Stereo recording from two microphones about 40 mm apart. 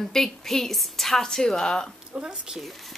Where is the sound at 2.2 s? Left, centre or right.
Centre.